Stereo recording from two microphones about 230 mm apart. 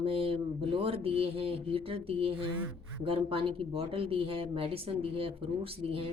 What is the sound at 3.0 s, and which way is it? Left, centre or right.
Speech, right.